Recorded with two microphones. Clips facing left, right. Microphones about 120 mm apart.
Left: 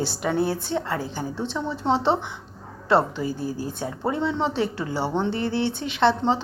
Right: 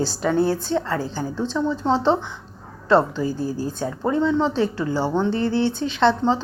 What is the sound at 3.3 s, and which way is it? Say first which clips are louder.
Speech: right 3 dB; 30° right (ahead or behind).